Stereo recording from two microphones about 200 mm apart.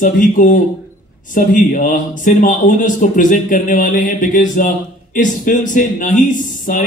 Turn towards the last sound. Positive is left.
turn(degrees=40)  # may be behind; listen again after turning